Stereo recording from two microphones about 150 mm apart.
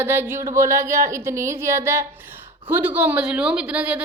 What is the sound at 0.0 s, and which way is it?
A woman's voice, 15° right (ahead or behind).